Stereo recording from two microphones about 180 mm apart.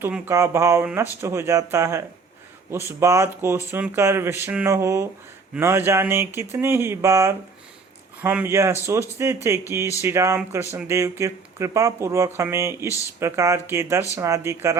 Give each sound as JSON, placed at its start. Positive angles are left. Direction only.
{"t": 0.0, "sound": "speech", "side_deg": -15}